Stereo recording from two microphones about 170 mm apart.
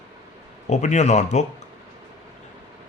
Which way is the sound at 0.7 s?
45° left (ahead or behind).